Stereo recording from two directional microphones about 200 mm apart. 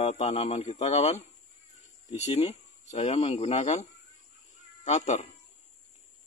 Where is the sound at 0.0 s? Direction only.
35° left (ahead or behind).